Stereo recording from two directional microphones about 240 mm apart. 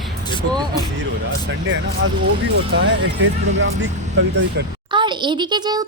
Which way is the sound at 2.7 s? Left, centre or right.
Right.